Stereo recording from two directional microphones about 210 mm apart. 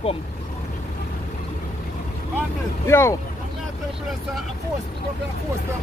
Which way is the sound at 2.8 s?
10° left (ahead or behind).